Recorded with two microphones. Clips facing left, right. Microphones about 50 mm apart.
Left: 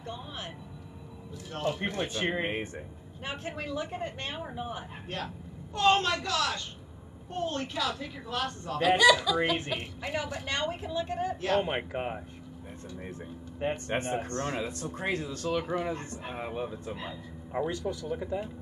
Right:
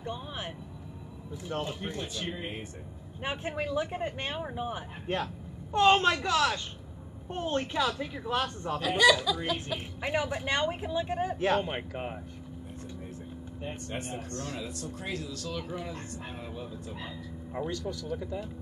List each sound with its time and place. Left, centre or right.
0.0 s vehicle: centre
1.7 s speech: left
3.3 s a woman's voice: centre
5.1 s a woman's voice: right
8.8 s speech: centre
10.0 s a woman's voice: centre
11.5 s speech: centre
13.6 s speech: left
17.0 s speech: centre